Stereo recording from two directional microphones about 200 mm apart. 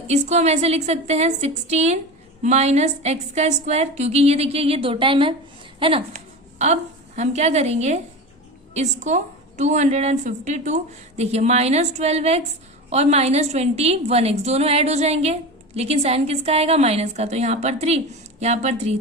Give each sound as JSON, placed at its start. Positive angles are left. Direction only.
{"t": 0.1, "sound": "a woman's voice", "side_deg": -35}
{"t": 5.8, "sound": "a sound", "side_deg": -30}
{"t": 7.2, "sound": "a woman's voice", "side_deg": -35}